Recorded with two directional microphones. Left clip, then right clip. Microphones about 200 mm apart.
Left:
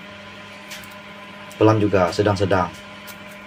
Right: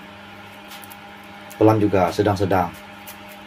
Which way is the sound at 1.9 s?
10° right (ahead or behind).